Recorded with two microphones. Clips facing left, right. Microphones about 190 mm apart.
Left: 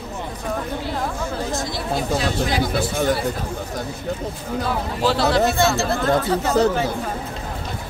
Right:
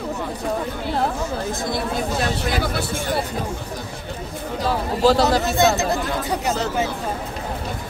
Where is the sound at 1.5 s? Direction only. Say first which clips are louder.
Right 1 dB; 55° right (ahead or behind).